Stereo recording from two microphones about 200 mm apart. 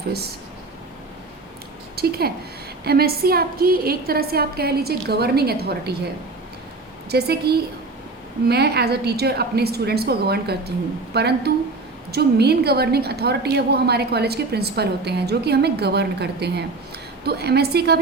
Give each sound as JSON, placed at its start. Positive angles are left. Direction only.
{"t": 2.0, "sound": "a woman's voice", "side_deg": -50}
{"t": 7.1, "sound": "a woman's voice", "side_deg": -55}